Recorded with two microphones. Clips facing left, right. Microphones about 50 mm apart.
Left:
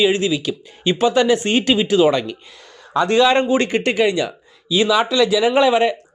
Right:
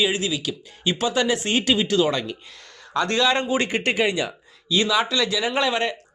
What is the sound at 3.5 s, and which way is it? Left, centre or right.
Speech, centre.